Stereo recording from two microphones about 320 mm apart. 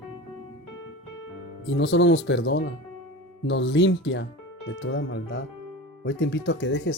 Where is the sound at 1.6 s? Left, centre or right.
Left.